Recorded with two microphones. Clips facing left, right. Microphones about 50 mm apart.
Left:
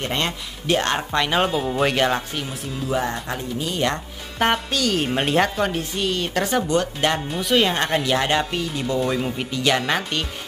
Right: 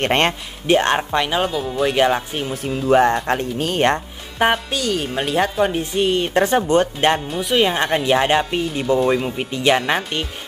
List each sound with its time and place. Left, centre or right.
0.0 s speech: right
0.7 s speech: right
2.5 s speech: right
4.4 s speech: centre
4.9 s speech: centre
5.7 s speech: right
7.2 s speech: centre
8.0 s speech: right